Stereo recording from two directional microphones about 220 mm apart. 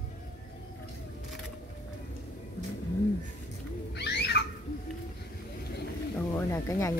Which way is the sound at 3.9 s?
50° left (ahead or behind).